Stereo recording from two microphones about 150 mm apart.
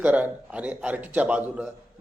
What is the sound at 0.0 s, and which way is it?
A man's voice, 10° right (ahead or behind).